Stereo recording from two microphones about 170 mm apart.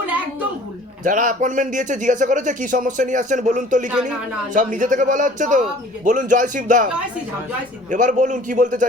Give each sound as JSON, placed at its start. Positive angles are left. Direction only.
{"t": 1.0, "sound": "speech", "side_deg": -50}